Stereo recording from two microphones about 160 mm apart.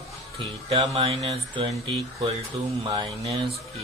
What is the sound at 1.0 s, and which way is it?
Speech, 40° right (ahead or behind).